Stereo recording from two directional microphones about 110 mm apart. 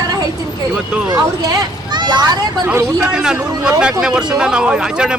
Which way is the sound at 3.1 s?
5° right (ahead or behind).